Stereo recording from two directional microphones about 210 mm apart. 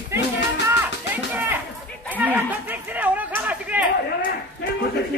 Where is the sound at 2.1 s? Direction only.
10° right (ahead or behind).